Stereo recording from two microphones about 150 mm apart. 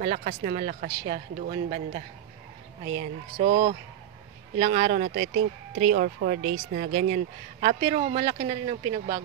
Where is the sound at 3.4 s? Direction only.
70° right (ahead or behind).